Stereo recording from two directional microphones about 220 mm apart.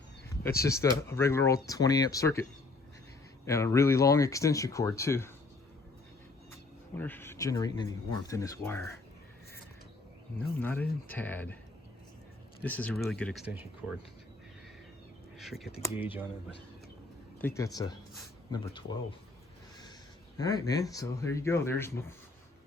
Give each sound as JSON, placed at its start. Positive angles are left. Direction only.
{"t": 0.6, "sound": "speech", "side_deg": 15}
{"t": 6.9, "sound": "speech", "side_deg": 10}
{"t": 10.6, "sound": "speech", "side_deg": 10}
{"t": 12.6, "sound": "speech", "side_deg": 5}
{"t": 15.4, "sound": "speech", "side_deg": 0}
{"t": 17.4, "sound": "speech", "side_deg": 15}
{"t": 20.4, "sound": "speech", "side_deg": 15}